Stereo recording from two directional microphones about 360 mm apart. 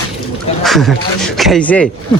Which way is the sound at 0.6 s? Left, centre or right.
Centre.